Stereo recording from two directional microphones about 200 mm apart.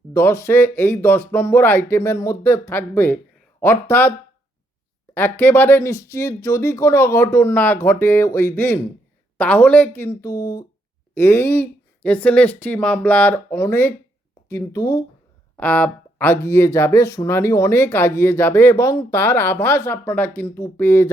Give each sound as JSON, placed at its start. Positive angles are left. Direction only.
{"t": 0.1, "sound": "speech", "side_deg": 15}
{"t": 5.1, "sound": "speech", "side_deg": 10}